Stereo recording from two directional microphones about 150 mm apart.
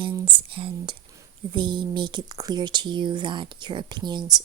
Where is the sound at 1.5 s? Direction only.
30° right (ahead or behind).